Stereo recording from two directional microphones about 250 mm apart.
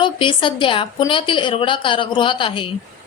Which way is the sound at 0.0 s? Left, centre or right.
Centre.